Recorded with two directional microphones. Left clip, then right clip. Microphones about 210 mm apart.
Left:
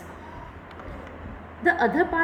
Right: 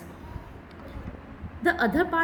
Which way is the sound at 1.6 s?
55° right (ahead or behind).